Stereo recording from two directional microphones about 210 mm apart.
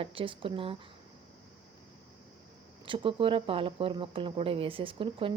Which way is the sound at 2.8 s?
25° right (ahead or behind).